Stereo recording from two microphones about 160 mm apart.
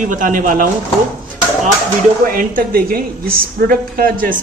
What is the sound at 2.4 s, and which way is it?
Speech, 65° right (ahead or behind).